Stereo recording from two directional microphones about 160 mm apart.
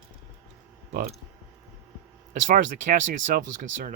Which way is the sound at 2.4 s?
60° right (ahead or behind).